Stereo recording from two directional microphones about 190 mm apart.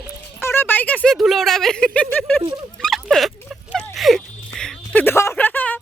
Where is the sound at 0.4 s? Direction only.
10° left (ahead or behind).